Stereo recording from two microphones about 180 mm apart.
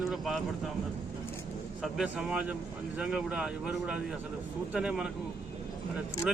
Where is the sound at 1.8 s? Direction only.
Centre (ahead or behind).